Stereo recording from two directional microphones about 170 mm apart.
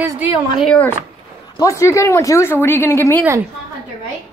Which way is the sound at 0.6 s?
5° left (ahead or behind).